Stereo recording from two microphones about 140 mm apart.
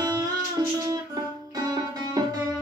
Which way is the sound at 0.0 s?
30° right (ahead or behind).